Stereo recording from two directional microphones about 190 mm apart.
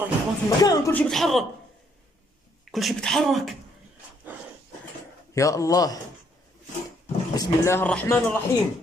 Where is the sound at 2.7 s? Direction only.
Centre (ahead or behind).